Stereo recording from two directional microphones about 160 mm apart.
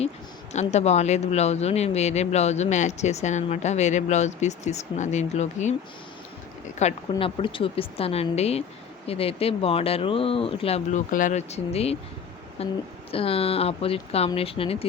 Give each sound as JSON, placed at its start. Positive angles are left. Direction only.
{"t": 0.5, "sound": "speech", "side_deg": 45}
{"t": 6.7, "sound": "speech", "side_deg": 40}
{"t": 11.1, "sound": "speech", "side_deg": 55}